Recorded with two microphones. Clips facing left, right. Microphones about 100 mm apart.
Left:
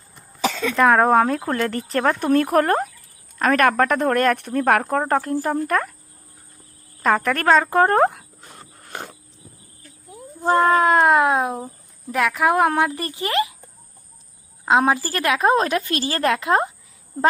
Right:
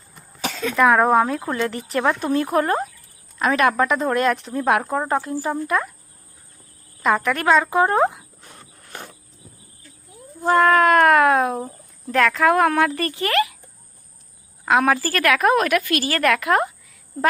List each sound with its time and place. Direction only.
0.7 s speech: 5° right (ahead or behind)
0.9 s a woman's voice: 40° left (ahead or behind)
2.2 s a woman's voice: 55° left (ahead or behind)
7.0 s a woman's voice: 45° left (ahead or behind)
8.8 s a sound: 55° left (ahead or behind)
10.4 s a woman's voice: 25° left (ahead or behind)
14.6 s a woman's voice: 25° left (ahead or behind)